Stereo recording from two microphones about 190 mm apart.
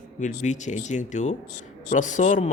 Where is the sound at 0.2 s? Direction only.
40° left (ahead or behind).